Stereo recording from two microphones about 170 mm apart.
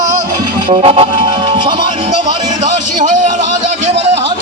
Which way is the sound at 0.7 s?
35° right (ahead or behind).